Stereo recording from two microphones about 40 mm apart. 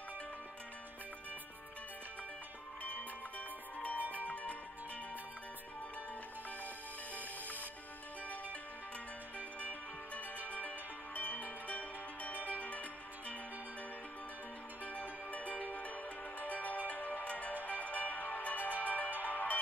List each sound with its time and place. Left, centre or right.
2.8 s music: left
9.6 s music: left
14.9 s music: left